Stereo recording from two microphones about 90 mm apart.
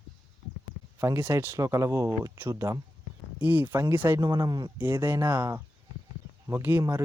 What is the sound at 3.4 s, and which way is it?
Speech, 20° right (ahead or behind).